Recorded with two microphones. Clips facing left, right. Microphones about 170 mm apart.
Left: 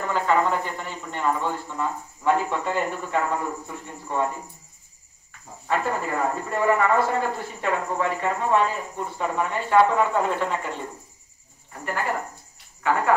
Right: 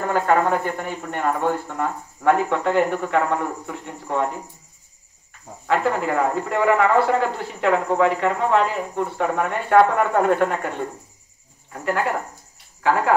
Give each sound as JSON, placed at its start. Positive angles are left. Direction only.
{"t": 0.0, "sound": "speech", "side_deg": -50}
{"t": 5.7, "sound": "speech", "side_deg": -75}
{"t": 11.7, "sound": "speech", "side_deg": -75}